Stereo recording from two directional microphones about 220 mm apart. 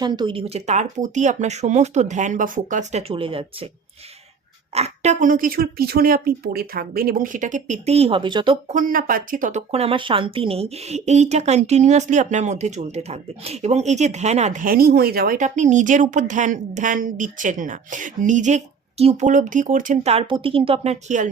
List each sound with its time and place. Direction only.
0.0 s speech: 20° right (ahead or behind)
4.7 s speech: 30° right (ahead or behind)
8.7 s speech: 35° right (ahead or behind)